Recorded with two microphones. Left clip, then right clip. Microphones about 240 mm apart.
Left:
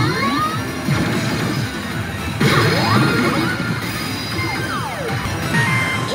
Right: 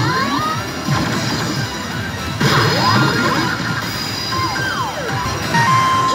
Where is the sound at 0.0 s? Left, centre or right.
Centre.